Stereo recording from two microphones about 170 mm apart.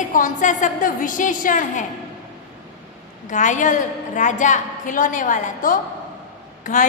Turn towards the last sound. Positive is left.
turn(degrees=50)  # may be behind; listen again after turning